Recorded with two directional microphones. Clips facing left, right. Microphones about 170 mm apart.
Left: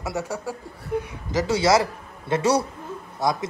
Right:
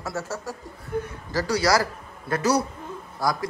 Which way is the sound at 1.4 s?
25° left (ahead or behind).